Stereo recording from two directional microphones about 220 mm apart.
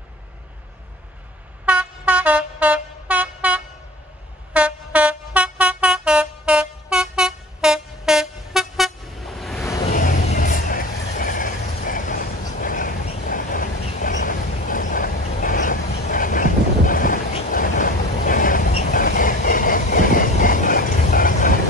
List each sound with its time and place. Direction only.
1.7 s vehicle: 5° right (ahead or behind)
4.6 s vehicle horn: 5° right (ahead or behind)
9.9 s vehicle: 35° left (ahead or behind)
12.5 s train: 40° left (ahead or behind)